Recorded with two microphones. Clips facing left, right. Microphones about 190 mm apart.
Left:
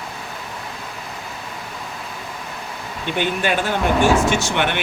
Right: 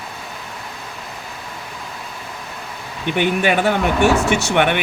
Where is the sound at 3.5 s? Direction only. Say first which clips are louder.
Right 2 dB; 65° right (ahead or behind).